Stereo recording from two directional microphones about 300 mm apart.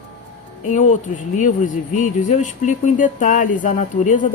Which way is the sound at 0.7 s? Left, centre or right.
Left.